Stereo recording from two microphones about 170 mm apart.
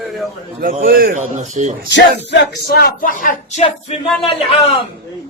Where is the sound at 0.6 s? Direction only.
55° right (ahead or behind).